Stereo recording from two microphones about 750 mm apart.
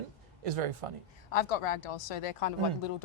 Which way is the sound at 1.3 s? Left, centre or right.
Left.